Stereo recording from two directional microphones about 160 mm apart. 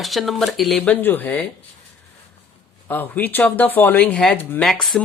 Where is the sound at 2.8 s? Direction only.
10° left (ahead or behind).